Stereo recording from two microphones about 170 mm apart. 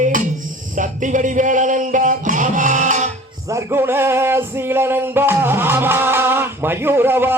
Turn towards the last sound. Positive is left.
turn(degrees=-10)  # may be behind; listen again after turning